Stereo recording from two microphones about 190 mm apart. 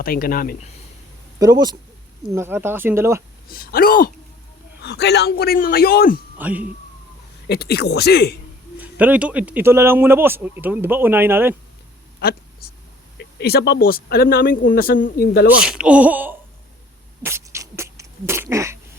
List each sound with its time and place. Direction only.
0.0 s speech: 50° left (ahead or behind)
1.4 s a man's voice: 20° right (ahead or behind)
3.5 s speech: 50° left (ahead or behind)
4.8 s speech: 60° left (ahead or behind)
6.3 s speech: 10° right (ahead or behind)
7.4 s a man's voice: 60° left (ahead or behind)
8.8 s speech: 10° right (ahead or behind)
12.2 s a man's voice: 55° left (ahead or behind)
15.4 s speech: 5° right (ahead or behind)
17.2 s beatboxing: 15° right (ahead or behind)